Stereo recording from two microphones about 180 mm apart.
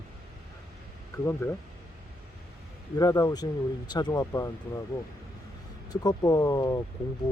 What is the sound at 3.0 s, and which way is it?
Speech, 20° left (ahead or behind).